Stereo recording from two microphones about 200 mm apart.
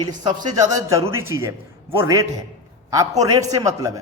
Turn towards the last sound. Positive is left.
turn(degrees=-15)  # may be behind; listen again after turning